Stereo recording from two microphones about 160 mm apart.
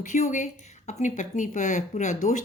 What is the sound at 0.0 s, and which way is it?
A woman's voice, 50° left (ahead or behind).